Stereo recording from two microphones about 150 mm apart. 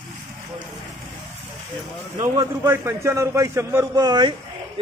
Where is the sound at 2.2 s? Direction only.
20° right (ahead or behind).